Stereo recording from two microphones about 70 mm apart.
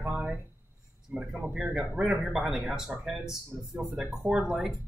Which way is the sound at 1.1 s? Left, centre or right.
Centre.